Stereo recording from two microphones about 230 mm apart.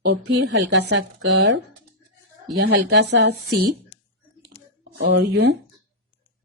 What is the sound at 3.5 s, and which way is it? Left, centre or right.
Speech, right.